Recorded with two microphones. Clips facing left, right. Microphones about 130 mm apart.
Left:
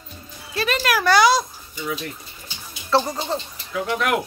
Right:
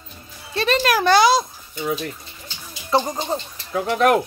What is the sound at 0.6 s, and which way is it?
Speech, 25° right (ahead or behind).